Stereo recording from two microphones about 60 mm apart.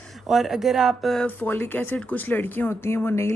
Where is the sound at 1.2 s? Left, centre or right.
Left.